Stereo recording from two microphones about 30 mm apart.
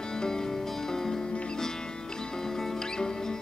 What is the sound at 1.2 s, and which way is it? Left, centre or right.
Music, left.